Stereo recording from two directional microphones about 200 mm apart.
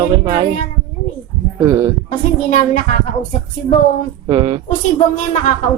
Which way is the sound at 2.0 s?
35° left (ahead or behind).